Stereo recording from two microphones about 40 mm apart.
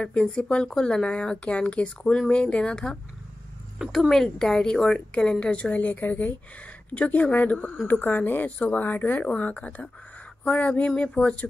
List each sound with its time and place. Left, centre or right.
0.0 s speech: left
4.1 s speech: centre
4.9 s speech: left
5.8 s speech: left
6.9 s speech: left
8.2 s speech: left
8.5 s speech: left
8.7 s speech: left
9.4 s speech: left